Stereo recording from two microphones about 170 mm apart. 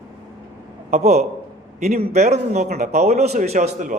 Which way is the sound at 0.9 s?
40° right (ahead or behind).